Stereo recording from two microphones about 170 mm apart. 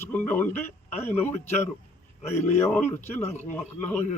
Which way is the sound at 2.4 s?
40° left (ahead or behind).